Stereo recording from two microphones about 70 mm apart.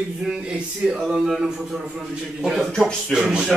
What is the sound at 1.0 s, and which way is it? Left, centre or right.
A man's voice, centre.